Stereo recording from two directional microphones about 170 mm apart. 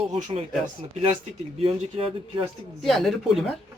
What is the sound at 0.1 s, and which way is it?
Speech, 40° right (ahead or behind).